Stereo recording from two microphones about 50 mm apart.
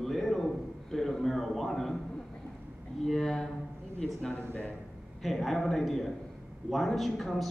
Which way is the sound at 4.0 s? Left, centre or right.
Left.